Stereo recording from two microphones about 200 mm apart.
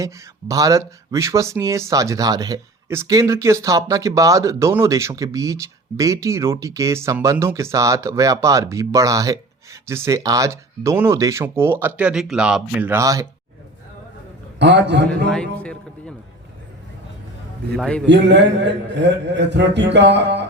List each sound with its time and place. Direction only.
0.0 s speech: 15° right (ahead or behind)
14.6 s a man's voice: 60° right (ahead or behind)
15.3 s a man's voice: 5° left (ahead or behind)
17.7 s a man's voice: 5° left (ahead or behind)
18.0 s a man's voice: 60° right (ahead or behind)